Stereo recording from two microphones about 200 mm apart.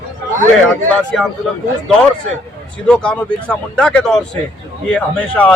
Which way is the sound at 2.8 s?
5° left (ahead or behind).